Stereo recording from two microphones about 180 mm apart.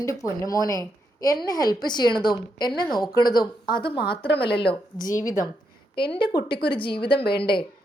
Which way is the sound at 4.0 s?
60° left (ahead or behind).